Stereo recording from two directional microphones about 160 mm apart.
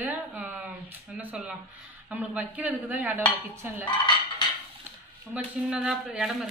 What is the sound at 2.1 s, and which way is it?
Dishes, 10° right (ahead or behind).